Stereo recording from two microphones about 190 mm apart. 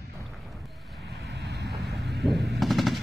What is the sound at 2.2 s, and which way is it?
Machine gun, centre (ahead or behind).